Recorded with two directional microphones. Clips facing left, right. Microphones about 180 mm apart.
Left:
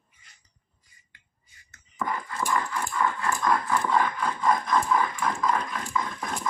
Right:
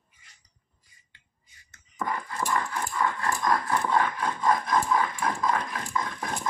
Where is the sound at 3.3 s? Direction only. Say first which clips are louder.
Left 1 dB; 15° right (ahead or behind).